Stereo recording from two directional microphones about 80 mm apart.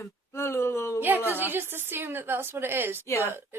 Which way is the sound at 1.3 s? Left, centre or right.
Right.